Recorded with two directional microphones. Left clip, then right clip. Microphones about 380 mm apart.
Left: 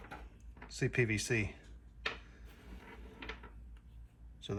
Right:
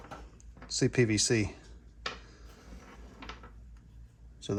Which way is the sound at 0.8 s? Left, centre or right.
Centre.